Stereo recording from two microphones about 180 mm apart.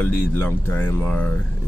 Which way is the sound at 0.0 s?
10° left (ahead or behind).